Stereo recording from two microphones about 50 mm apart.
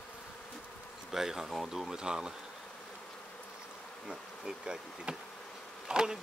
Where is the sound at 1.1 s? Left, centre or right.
Centre.